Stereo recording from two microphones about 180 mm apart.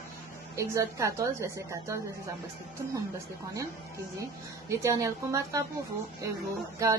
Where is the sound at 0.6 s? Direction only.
15° right (ahead or behind).